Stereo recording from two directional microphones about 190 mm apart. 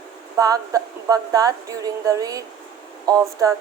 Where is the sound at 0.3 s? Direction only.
20° right (ahead or behind).